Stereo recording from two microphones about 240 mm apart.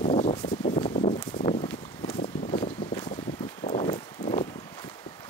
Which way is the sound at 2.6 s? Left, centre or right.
Left.